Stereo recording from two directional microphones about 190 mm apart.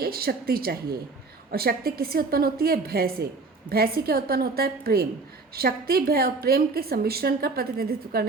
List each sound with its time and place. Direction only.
0.0 s a woman's voice: 50° right (ahead or behind)